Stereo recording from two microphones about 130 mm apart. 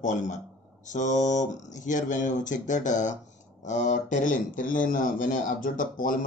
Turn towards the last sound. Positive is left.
turn(degrees=90)